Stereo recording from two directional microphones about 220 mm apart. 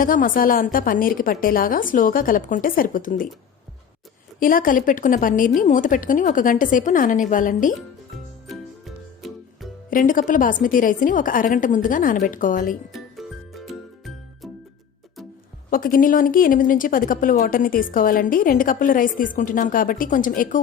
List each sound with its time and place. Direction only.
0.0 s speech: 40° left (ahead or behind)
4.4 s speech: 40° left (ahead or behind)
9.2 s music: centre (ahead or behind)
9.9 s speech: 35° left (ahead or behind)
12.9 s music: centre (ahead or behind)
15.7 s speech: 40° left (ahead or behind)